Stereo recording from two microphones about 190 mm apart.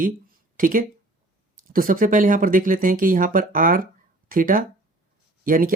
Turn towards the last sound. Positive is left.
turn(degrees=-45)  # may be behind; listen again after turning